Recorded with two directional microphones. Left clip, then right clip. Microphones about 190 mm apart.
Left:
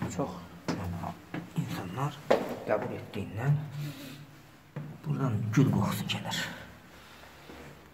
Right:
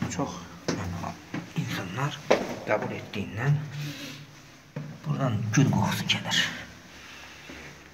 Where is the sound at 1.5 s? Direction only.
10° left (ahead or behind).